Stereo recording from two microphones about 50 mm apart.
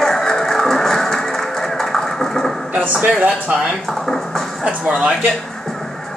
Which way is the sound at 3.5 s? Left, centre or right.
Right.